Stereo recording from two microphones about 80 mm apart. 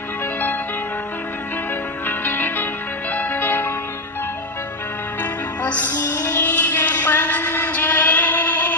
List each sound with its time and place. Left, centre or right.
2.0 s music: left
5.2 s music: left
6.0 s music: left; by 8.7 s centre